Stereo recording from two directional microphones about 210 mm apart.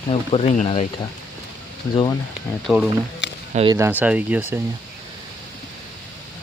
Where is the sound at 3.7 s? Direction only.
10° right (ahead or behind).